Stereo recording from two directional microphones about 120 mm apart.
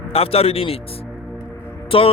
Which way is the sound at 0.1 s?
55° left (ahead or behind).